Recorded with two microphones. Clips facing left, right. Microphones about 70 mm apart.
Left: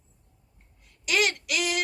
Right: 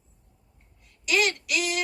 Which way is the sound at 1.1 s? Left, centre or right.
Left.